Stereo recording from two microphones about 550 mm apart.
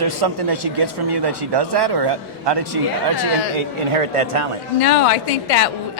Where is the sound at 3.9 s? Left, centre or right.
Right.